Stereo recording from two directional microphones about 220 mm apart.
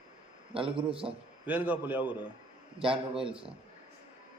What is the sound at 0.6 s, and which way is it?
Speech, 25° right (ahead or behind).